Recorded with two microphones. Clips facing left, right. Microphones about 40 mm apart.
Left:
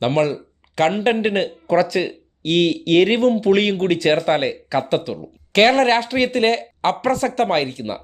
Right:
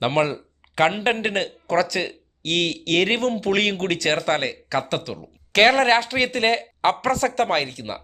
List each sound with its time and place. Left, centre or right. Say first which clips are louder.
0.1 s speech: left 3 dB; centre
1.1 s speech: left 4 dB; centre
5.6 s speech: left 1 dB; centre
6.9 s speech: left 2 dB; centre